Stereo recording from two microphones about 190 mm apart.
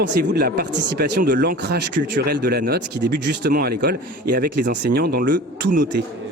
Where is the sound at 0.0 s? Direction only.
60° right (ahead or behind).